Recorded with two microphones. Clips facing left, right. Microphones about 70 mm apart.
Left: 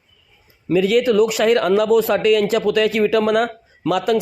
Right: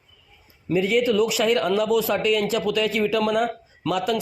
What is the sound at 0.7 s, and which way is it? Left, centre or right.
A man's voice, left.